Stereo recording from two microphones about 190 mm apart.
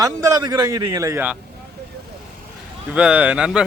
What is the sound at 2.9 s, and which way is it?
Speech, 5° right (ahead or behind).